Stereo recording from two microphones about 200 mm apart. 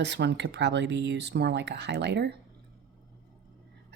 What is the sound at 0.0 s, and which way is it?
Speech, 60° right (ahead or behind).